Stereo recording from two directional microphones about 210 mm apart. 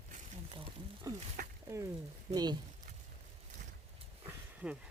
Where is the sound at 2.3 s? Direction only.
20° right (ahead or behind).